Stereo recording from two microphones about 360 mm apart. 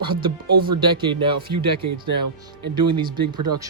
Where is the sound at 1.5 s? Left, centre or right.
Right.